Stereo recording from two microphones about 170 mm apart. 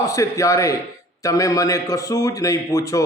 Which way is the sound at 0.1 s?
20° left (ahead or behind).